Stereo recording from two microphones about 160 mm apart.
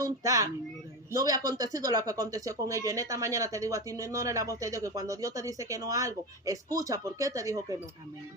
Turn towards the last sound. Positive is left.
turn(degrees=-20)  # may be behind; listen again after turning